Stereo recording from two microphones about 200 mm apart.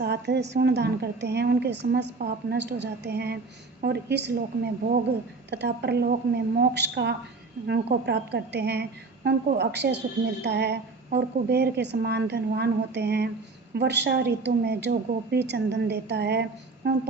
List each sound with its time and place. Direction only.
0.0 s a woman's voice: 55° right (ahead or behind)